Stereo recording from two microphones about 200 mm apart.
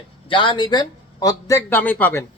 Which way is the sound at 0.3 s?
25° left (ahead or behind).